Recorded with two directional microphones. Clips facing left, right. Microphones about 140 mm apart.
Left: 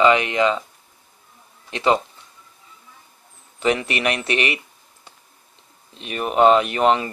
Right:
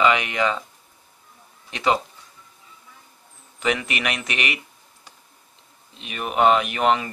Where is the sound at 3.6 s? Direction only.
30° left (ahead or behind).